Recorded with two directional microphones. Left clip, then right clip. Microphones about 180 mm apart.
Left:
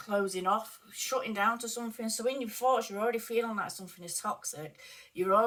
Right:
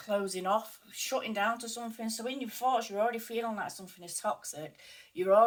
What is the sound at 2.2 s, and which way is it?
Speech, 10° right (ahead or behind).